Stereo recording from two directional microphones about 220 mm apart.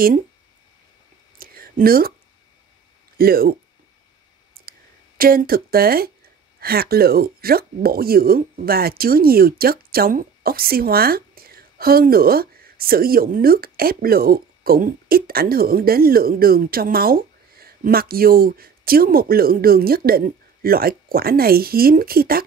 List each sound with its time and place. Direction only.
1.4 s a sound: 40° right (ahead or behind)
3.2 s speech: 45° right (ahead or behind)
4.6 s speech: 40° right (ahead or behind)